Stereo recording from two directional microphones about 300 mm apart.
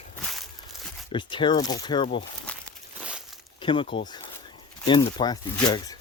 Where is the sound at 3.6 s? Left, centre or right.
Centre.